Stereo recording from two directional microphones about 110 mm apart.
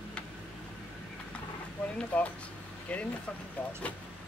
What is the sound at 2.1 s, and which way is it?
Speech, 10° left (ahead or behind).